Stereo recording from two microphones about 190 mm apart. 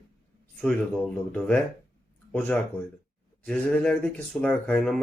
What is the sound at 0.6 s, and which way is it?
Speech, 5° left (ahead or behind).